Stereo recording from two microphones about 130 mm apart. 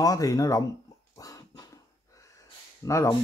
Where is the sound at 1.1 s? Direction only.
25° left (ahead or behind).